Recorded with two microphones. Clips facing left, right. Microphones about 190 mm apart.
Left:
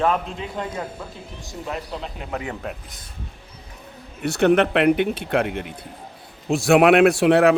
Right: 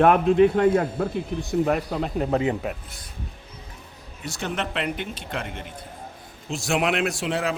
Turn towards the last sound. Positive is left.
turn(degrees=65)  # may be behind; listen again after turning